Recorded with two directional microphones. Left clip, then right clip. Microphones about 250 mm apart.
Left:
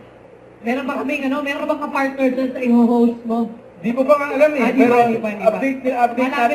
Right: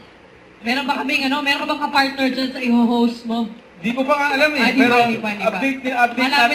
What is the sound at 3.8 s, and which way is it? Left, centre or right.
Mantra, centre.